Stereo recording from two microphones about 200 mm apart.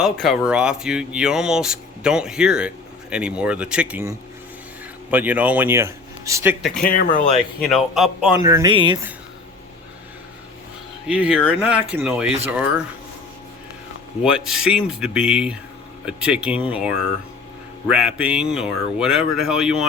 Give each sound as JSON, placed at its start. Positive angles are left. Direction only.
{"t": 0.0, "sound": "speech", "side_deg": 0}
{"t": 5.1, "sound": "a man's voice", "side_deg": -10}
{"t": 6.8, "sound": "speech", "side_deg": 45}
{"t": 7.6, "sound": "speech", "side_deg": 0}
{"t": 8.4, "sound": "speech", "side_deg": -20}
{"t": 11.0, "sound": "speech", "side_deg": -5}
{"t": 14.3, "sound": "speech", "side_deg": -5}